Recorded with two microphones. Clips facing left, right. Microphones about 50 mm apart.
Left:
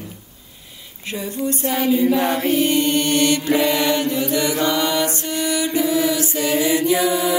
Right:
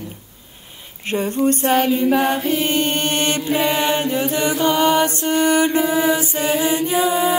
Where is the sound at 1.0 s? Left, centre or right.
Right.